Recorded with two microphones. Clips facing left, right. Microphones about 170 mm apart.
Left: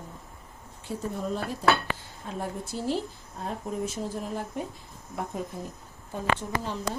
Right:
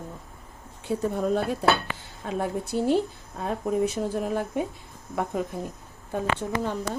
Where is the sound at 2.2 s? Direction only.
75° right (ahead or behind).